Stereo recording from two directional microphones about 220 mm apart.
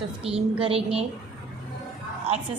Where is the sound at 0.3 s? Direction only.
5° right (ahead or behind).